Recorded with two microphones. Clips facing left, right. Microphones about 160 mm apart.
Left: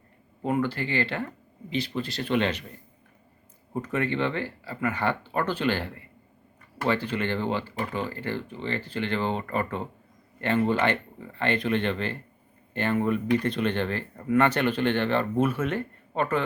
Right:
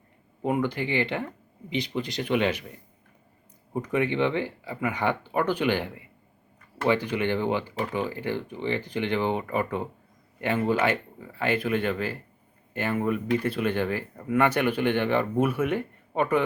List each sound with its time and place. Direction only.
0.4 s speech: 15° right (ahead or behind)